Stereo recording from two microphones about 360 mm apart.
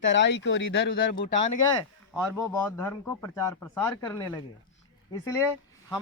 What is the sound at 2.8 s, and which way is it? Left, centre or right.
A man's voice, centre.